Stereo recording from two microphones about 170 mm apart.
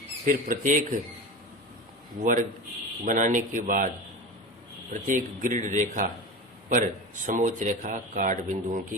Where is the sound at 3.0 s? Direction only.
50° right (ahead or behind).